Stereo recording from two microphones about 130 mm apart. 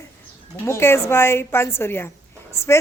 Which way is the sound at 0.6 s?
20° left (ahead or behind).